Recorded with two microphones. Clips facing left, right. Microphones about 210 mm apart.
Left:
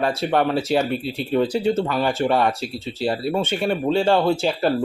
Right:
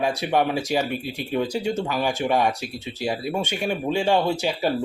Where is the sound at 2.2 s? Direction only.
15° right (ahead or behind).